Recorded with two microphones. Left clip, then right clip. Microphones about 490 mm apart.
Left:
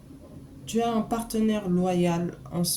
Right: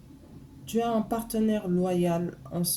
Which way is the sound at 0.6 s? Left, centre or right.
Right.